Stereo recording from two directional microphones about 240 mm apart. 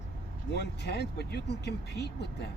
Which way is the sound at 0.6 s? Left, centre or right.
Left.